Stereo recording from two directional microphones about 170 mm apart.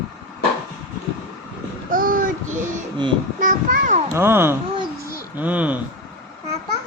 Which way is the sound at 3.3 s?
50° right (ahead or behind).